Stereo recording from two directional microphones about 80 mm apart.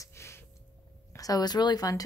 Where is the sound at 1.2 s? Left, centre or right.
Left.